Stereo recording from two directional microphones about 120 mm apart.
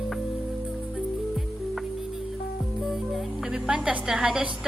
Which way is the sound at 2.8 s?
5° right (ahead or behind).